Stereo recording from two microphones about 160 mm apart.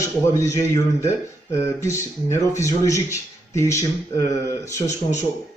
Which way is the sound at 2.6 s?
20° left (ahead or behind).